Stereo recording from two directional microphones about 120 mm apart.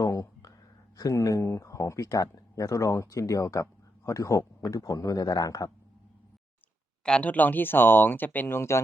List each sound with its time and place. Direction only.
0.0 s a sound: 30° left (ahead or behind)
0.9 s speech: 30° left (ahead or behind)
7.0 s speech: 10° left (ahead or behind)